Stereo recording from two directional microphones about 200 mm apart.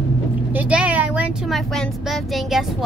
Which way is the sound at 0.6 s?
5° right (ahead or behind).